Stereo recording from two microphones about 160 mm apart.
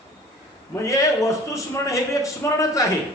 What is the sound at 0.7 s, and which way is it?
A man's voice, 20° left (ahead or behind).